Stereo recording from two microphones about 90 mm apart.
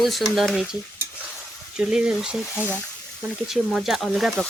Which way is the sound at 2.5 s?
20° right (ahead or behind).